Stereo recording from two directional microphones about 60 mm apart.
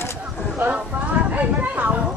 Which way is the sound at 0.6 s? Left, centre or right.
Right.